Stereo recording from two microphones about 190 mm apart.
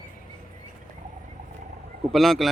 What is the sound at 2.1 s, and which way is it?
Speech, centre (ahead or behind).